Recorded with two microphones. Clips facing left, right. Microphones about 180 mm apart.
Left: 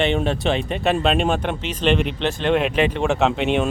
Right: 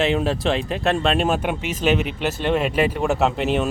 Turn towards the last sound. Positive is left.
turn(degrees=0)  # may be behind; listen again after turning